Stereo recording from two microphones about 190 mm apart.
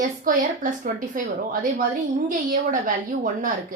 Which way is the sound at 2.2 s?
45° right (ahead or behind).